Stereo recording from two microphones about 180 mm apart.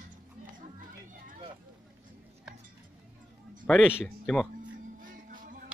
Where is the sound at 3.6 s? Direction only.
5° left (ahead or behind).